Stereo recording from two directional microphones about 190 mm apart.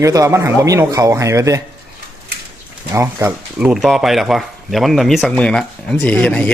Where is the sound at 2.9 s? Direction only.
15° right (ahead or behind).